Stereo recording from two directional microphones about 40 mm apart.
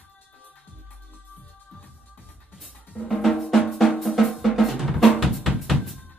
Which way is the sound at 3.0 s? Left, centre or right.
Centre.